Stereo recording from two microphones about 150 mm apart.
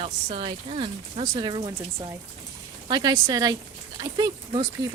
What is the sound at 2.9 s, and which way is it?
Speech, 25° right (ahead or behind).